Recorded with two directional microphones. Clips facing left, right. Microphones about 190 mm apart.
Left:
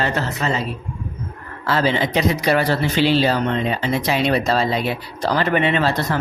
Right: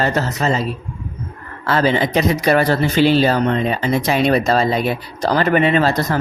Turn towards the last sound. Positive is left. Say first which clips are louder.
# right 3 dB
turn(degrees=-40)  # may be behind; listen again after turning